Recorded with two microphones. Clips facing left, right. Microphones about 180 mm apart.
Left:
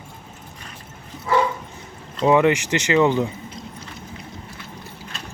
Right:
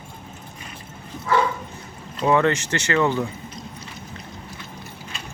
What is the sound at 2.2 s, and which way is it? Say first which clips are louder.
Speech: left 3 dB; 15° left (ahead or behind).